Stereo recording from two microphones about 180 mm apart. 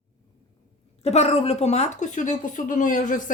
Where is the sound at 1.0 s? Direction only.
35° left (ahead or behind).